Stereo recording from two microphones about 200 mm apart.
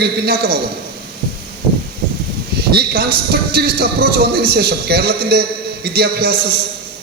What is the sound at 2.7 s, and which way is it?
Speech, 50° right (ahead or behind).